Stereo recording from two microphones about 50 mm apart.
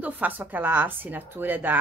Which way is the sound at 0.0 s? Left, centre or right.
Right.